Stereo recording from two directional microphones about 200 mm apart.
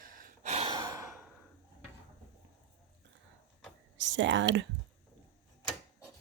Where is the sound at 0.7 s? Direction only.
15° right (ahead or behind).